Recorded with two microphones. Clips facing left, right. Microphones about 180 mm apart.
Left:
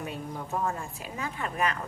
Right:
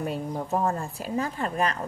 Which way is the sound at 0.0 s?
40° right (ahead or behind).